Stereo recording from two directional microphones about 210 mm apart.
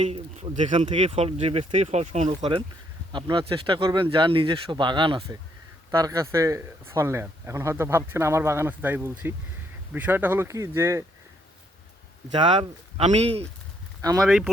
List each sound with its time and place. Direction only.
0.0 s speech: 25° right (ahead or behind)
12.3 s speech: 25° right (ahead or behind)
14.2 s speech: centre (ahead or behind)